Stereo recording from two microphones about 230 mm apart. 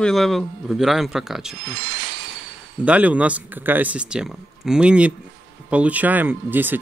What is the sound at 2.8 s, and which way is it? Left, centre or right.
Speech, centre.